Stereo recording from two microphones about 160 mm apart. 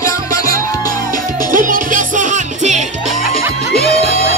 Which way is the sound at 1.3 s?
55° right (ahead or behind).